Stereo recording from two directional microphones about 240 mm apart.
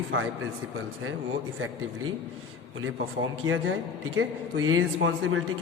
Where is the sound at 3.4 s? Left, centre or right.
Right.